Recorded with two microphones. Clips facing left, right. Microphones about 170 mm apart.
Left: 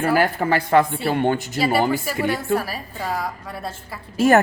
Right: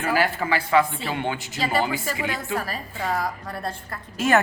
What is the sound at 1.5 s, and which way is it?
A woman's voice, 10° left (ahead or behind).